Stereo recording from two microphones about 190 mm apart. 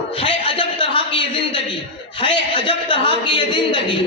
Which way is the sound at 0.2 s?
25° left (ahead or behind).